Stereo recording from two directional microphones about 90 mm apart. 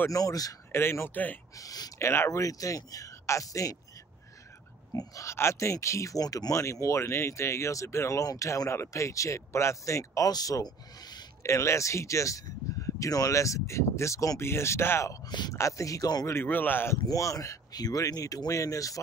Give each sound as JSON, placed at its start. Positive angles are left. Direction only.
{"t": 0.1, "sound": "speech", "side_deg": 40}
{"t": 0.7, "sound": "speech", "side_deg": 30}
{"t": 1.6, "sound": "speech", "side_deg": 40}
{"t": 2.0, "sound": "speech", "side_deg": 30}
{"t": 4.9, "sound": "speech", "side_deg": 35}
{"t": 6.5, "sound": "speech", "side_deg": 35}
{"t": 11.4, "sound": "speech", "side_deg": 30}
{"t": 15.2, "sound": "speech", "side_deg": 55}
{"t": 15.5, "sound": "speech", "side_deg": 35}
{"t": 16.3, "sound": "speech", "side_deg": 25}
{"t": 17.1, "sound": "speech", "side_deg": 40}